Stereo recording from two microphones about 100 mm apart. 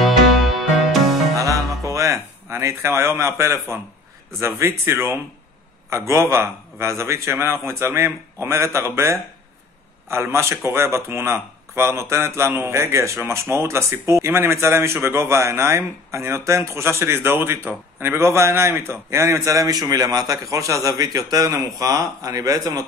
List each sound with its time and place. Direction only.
0.0 s music: centre (ahead or behind)
1.3 s music: 35° right (ahead or behind)
1.9 s a man's voice: 30° right (ahead or behind)